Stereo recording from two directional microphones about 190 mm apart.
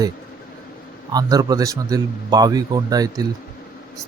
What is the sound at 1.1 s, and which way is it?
A man's voice, 20° right (ahead or behind).